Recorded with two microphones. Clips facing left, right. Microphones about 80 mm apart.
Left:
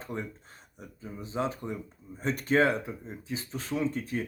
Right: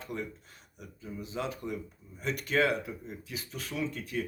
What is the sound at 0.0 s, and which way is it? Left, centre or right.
Speech, left.